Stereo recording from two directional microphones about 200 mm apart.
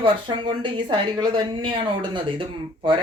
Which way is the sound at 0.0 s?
25° right (ahead or behind).